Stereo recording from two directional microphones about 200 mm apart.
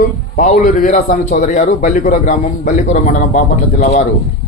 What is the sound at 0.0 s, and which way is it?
A man's voice, 40° left (ahead or behind).